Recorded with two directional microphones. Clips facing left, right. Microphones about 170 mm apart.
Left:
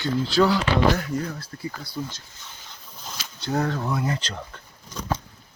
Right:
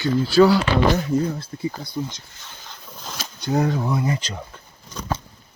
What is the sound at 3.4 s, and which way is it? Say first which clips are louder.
Speech: right 4 dB; 15° right (ahead or behind).